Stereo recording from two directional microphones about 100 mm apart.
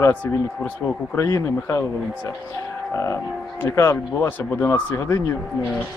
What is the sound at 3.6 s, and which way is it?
Speech, 25° left (ahead or behind).